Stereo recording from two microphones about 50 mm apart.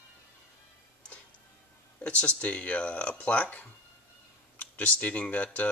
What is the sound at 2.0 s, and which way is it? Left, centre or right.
Speech, left.